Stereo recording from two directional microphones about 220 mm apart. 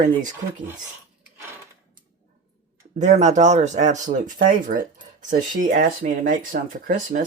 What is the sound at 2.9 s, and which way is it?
Speech, 35° right (ahead or behind).